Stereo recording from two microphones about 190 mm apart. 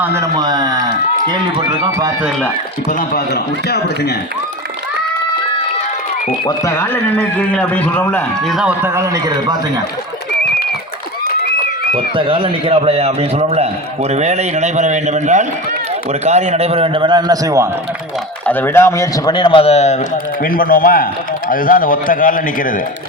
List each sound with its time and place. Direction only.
0.0 s a sound: 15° right (ahead or behind)
1.8 s a man's voice: 20° right (ahead or behind)
3.1 s a man's voice: 55° left (ahead or behind)
6.7 s a man's voice: 10° left (ahead or behind)
8.5 s a man's voice: 10° right (ahead or behind)
11.9 s a man's voice: 30° right (ahead or behind)
18.4 s speech: 10° left (ahead or behind); by 20.0 s 35° left (ahead or behind)
20.4 s a man's voice: 50° left (ahead or behind)